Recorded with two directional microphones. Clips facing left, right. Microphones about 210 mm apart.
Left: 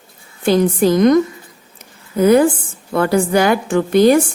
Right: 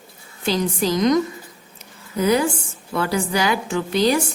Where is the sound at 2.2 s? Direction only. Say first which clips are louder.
Left 8 dB; 55° left (ahead or behind).